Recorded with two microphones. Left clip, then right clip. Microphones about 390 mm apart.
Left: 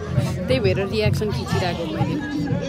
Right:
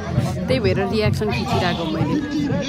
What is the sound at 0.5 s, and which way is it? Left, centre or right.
Speech, centre.